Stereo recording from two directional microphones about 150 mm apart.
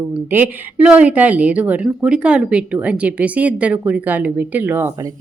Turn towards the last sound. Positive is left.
turn(degrees=-15)  # may be behind; listen again after turning